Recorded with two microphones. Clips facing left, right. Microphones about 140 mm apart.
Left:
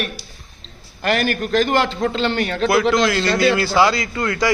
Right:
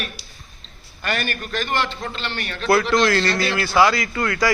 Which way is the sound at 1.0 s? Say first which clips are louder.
Left 7 dB; 85° left.